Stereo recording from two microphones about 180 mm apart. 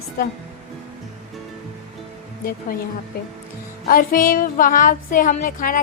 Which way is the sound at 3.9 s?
55° left (ahead or behind).